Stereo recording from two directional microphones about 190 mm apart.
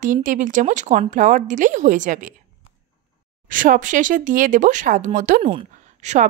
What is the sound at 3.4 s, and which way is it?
Speech, 45° right (ahead or behind).